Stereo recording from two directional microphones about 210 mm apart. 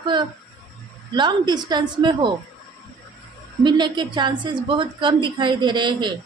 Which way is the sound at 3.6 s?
20° right (ahead or behind).